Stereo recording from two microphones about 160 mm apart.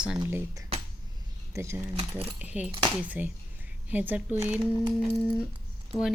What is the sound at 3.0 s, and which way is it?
A woman's voice, 10° right (ahead or behind).